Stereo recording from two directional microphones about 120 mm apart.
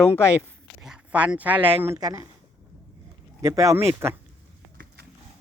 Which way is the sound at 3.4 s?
25° right (ahead or behind).